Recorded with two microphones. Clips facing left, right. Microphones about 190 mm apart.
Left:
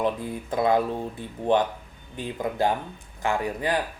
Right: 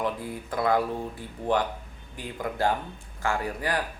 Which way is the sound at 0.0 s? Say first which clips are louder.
Left 4 dB; 20° left (ahead or behind).